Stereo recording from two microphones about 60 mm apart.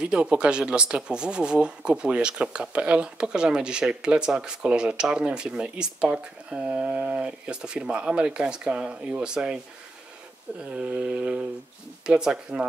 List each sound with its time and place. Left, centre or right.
0.0 s speech: centre
10.6 s speech: centre